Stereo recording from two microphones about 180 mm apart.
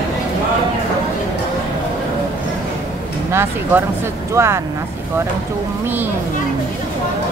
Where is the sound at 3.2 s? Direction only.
15° right (ahead or behind).